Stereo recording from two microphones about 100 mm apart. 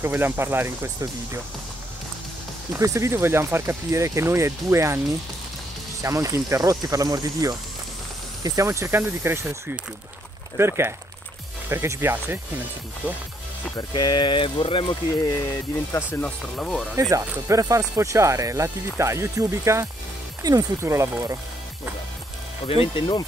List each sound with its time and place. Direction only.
0.0 s speech: 25° right (ahead or behind)
2.7 s speech: 30° right (ahead or behind)
6.0 s speech: 30° right (ahead or behind)
13.7 s speech: 45° left (ahead or behind); by 15.0 s 60° left (ahead or behind)
15.9 s speech: 20° left (ahead or behind)
16.5 s speech: 5° left (ahead or behind)
16.9 s speech: 35° right (ahead or behind)
22.7 s speech: 70° left (ahead or behind)